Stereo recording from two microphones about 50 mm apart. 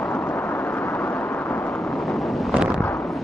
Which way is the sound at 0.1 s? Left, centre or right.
Left.